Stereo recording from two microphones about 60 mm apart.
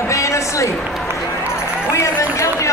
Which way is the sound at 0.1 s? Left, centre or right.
Left.